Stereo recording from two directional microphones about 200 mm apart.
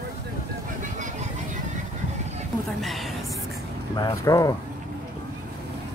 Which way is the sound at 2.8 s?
Centre (ahead or behind).